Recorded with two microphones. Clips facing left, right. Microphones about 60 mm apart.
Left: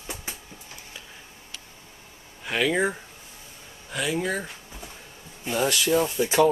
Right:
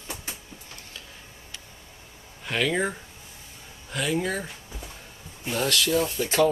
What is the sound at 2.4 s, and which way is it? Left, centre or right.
Speech, centre.